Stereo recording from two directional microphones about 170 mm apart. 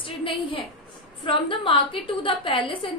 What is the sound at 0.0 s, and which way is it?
A woman's voice, 30° left (ahead or behind).